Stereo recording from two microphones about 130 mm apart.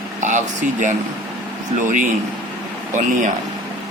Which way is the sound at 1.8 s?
90° right.